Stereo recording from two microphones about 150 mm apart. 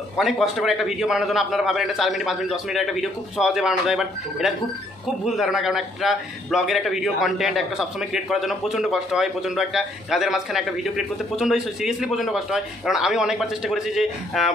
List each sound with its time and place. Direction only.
0.2 s a man's voice: centre (ahead or behind)